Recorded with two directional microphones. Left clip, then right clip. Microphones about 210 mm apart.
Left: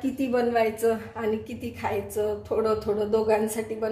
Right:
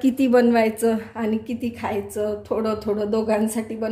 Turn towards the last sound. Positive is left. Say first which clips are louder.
# right 2 dB
turn(degrees=-55)  # may be behind; listen again after turning